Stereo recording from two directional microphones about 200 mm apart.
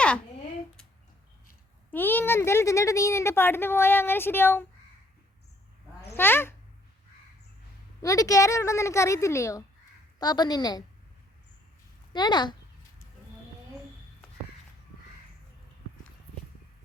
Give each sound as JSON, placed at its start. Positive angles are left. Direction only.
{"t": 1.9, "sound": "speech", "side_deg": 10}
{"t": 6.1, "sound": "speech", "side_deg": 10}
{"t": 8.0, "sound": "a woman's voice", "side_deg": 15}
{"t": 12.1, "sound": "a woman's voice", "side_deg": 20}